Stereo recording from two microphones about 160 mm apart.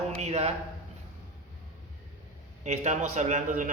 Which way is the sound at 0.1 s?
45° right (ahead or behind).